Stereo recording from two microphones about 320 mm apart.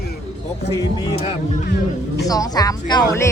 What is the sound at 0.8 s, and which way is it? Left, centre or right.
Speech, centre.